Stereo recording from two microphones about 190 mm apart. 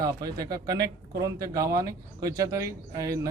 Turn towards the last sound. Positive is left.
turn(degrees=-20)  # may be behind; listen again after turning